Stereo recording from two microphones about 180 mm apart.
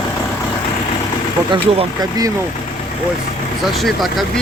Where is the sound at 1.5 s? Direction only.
25° right (ahead or behind).